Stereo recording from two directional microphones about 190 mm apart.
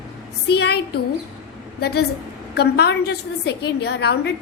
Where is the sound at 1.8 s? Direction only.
60° left (ahead or behind).